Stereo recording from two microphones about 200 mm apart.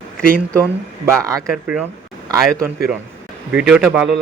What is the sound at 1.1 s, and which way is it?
Speech, 15° right (ahead or behind).